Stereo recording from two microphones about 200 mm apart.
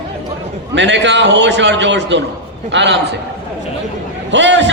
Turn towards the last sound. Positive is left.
turn(degrees=-65)  # may be behind; listen again after turning